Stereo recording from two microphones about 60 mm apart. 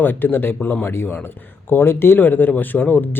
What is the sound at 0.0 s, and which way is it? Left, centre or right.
Speech, left.